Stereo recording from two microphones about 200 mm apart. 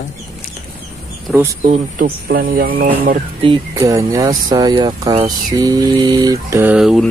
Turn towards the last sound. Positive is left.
turn(degrees=0)  # may be behind; listen again after turning